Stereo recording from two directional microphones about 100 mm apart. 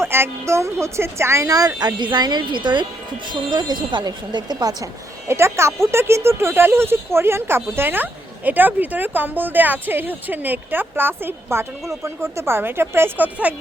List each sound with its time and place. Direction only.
0.0 s a woman's voice: 25° right (ahead or behind); by 4.9 s 40° right (ahead or behind)
5.3 s speech: 25° right (ahead or behind)